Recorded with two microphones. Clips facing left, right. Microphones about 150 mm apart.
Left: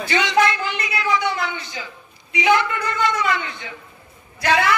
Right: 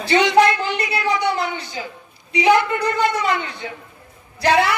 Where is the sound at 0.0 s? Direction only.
35° right (ahead or behind).